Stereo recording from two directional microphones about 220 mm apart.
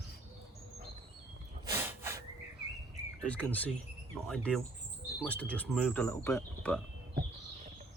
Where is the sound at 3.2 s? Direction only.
5° left (ahead or behind).